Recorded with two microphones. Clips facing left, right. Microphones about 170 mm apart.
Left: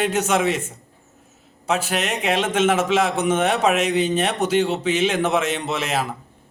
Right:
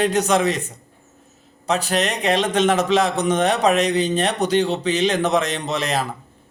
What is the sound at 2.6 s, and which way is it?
Speech, 35° right (ahead or behind).